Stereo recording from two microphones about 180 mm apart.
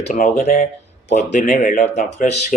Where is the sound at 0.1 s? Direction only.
45° left (ahead or behind).